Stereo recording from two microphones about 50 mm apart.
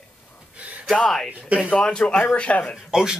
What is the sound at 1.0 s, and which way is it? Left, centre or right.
Speech, centre.